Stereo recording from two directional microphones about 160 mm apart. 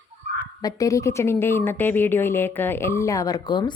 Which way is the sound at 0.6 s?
20° left (ahead or behind).